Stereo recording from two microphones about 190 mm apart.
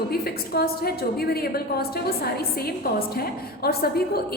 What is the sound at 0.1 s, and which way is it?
A woman's voice, 55° left (ahead or behind).